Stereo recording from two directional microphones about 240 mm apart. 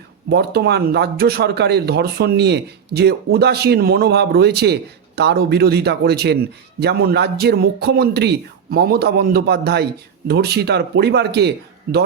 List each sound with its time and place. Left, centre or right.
0.3 s speech: right